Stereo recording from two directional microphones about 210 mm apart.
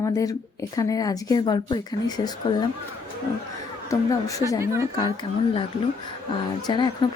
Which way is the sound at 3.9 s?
15° left (ahead or behind).